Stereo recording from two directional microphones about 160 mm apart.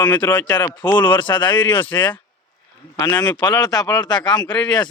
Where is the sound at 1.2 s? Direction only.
30° left (ahead or behind).